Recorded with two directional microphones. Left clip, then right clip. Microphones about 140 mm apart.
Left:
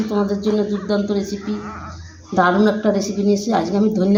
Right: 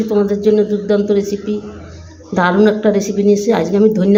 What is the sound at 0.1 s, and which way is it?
Speech, 15° right (ahead or behind).